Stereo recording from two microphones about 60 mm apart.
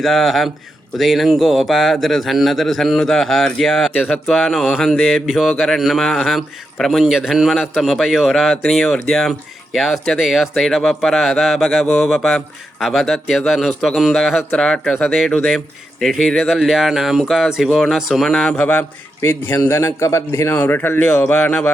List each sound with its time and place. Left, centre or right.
0.0 s a man's voice: centre
16.6 s a man's voice: centre; by 18.9 s left
19.2 s a man's voice: left
20.6 s speech: left